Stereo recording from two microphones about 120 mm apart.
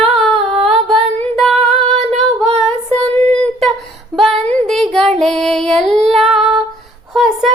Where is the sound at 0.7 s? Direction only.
5° left (ahead or behind).